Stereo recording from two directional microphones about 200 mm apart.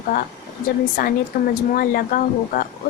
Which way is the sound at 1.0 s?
45° left (ahead or behind).